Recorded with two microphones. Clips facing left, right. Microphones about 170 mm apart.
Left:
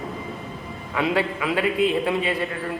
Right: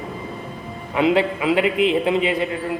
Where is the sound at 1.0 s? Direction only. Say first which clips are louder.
Right 5 dB; 20° right (ahead or behind).